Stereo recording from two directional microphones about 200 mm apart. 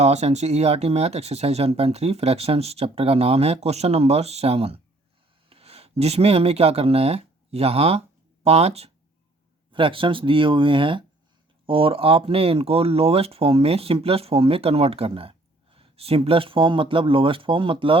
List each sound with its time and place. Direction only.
0.0 s speech: 35° right (ahead or behind)